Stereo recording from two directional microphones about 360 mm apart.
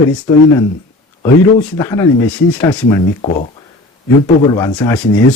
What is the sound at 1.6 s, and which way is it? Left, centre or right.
Speech, centre.